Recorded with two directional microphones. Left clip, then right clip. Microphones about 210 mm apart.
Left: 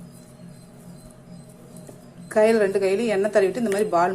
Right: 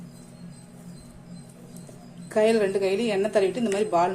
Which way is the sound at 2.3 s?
5° left (ahead or behind).